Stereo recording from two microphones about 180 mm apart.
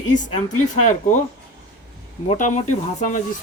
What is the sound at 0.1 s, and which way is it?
Speech, 45° left (ahead or behind).